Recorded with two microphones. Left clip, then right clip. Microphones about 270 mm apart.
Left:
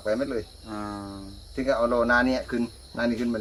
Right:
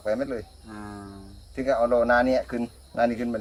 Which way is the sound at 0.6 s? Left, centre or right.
Left.